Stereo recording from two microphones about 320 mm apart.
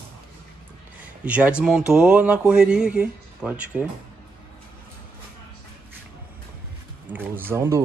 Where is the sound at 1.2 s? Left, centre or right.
Centre.